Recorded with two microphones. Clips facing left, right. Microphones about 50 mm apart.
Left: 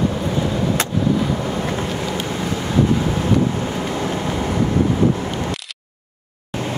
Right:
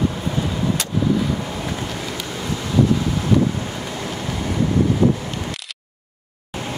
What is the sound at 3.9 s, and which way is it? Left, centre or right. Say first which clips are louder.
Vehicle: left 5 dB; left.